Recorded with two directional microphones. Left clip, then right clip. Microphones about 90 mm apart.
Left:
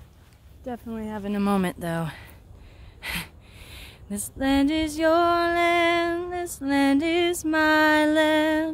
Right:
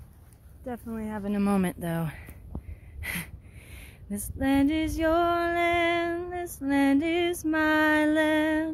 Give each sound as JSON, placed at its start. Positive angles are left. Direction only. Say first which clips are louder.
{"t": 0.7, "sound": "speech", "louder": "left 2 dB", "side_deg": 0}
{"t": 1.4, "sound": "speech", "louder": "left 3 dB", "side_deg": 20}
{"t": 1.7, "sound": "speech", "louder": "left 3 dB", "side_deg": 5}
{"t": 3.0, "sound": "a sound", "louder": "left 3 dB", "side_deg": 0}